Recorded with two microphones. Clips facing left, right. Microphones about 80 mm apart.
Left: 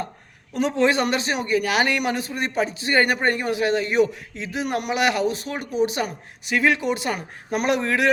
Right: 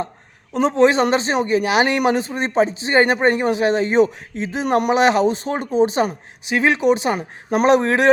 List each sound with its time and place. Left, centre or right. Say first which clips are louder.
0.5 s a man's voice: right 5 dB; right